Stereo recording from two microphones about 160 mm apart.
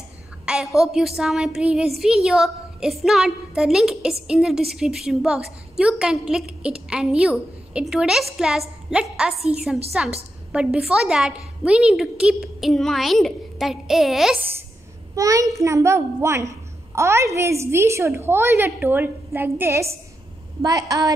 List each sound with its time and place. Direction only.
0.5 s a woman's voice: centre (ahead or behind)
15.1 s a child's voice: 20° right (ahead or behind)